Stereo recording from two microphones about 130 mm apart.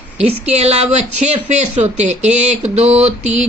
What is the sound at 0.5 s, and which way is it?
Speech, 55° right (ahead or behind).